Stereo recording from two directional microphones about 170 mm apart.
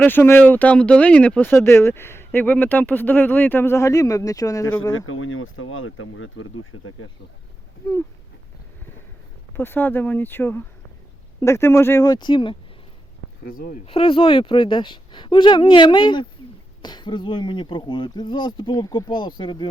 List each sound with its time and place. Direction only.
0.0 s speech: 10° left (ahead or behind)
9.6 s speech: 10° left (ahead or behind); by 12.5 s 30° left (ahead or behind)
13.4 s speech: 55° left (ahead or behind)
13.8 s speech: 35° left (ahead or behind)